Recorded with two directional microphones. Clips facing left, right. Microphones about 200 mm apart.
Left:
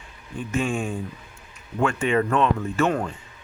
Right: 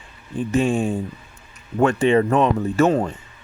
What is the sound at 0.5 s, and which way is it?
Speech, 40° right (ahead or behind).